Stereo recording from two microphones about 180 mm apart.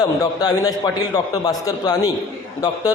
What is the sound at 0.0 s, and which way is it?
A man's voice, 20° left (ahead or behind).